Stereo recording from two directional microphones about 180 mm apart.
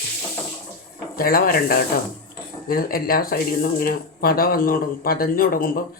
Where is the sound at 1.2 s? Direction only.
55° left (ahead or behind).